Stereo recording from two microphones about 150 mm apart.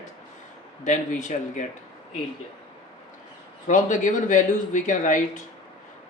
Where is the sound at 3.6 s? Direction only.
55° left (ahead or behind).